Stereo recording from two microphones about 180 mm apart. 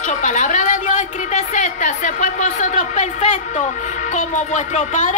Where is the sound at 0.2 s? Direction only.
40° left (ahead or behind).